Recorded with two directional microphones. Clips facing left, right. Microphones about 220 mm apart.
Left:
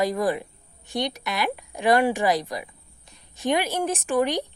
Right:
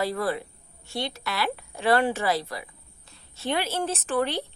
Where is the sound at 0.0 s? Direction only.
15° left (ahead or behind).